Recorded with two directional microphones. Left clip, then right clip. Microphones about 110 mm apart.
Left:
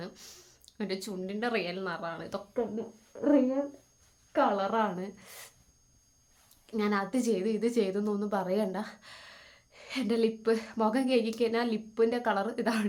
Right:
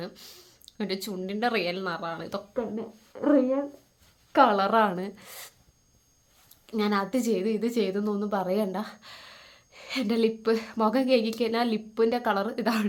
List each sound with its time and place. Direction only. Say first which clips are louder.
0.0 s speech: right 4 dB; 20° right (ahead or behind)
4.3 s speech: right 7 dB; 55° right (ahead or behind)
4.5 s a woman's voice: right 6 dB; 40° right (ahead or behind)
6.7 s a woman's voice: right 4 dB; 30° right (ahead or behind)